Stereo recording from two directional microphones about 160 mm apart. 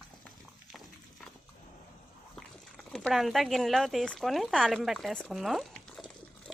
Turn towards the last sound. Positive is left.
turn(degrees=0)  # may be behind; listen again after turning